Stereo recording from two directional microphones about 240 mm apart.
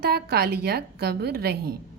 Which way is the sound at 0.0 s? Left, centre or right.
Right.